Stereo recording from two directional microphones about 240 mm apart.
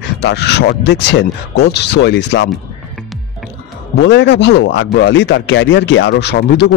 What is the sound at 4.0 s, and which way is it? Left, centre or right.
Speech, left.